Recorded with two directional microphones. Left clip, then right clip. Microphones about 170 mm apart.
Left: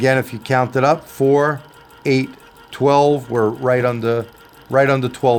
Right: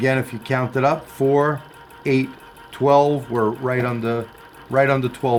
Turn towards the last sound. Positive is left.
turn(degrees=60)  # may be behind; listen again after turning